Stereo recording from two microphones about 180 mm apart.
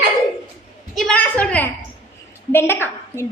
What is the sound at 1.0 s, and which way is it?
A woman's voice, 5° left (ahead or behind).